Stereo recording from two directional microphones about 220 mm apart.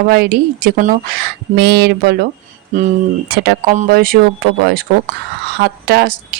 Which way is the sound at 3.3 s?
45° right (ahead or behind).